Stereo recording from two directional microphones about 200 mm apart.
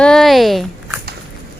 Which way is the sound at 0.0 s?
Centre (ahead or behind).